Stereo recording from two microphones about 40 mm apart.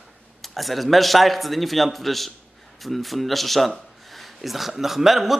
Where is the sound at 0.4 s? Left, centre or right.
Centre.